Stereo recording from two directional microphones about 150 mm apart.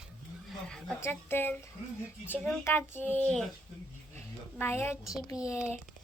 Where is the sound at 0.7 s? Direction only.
Centre (ahead or behind).